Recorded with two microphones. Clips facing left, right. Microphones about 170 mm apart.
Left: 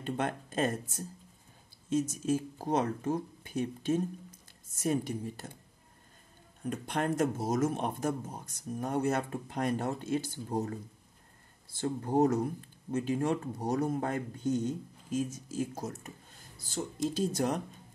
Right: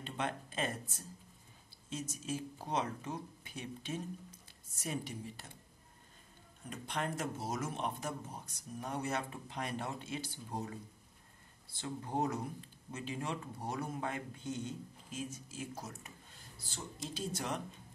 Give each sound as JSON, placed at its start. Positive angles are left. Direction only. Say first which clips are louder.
{"t": 0.0, "sound": "speech", "louder": "left 6 dB", "side_deg": 50}
{"t": 6.7, "sound": "speech", "louder": "left 7 dB", "side_deg": 50}